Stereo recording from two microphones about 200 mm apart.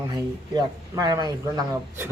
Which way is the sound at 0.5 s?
20° right (ahead or behind).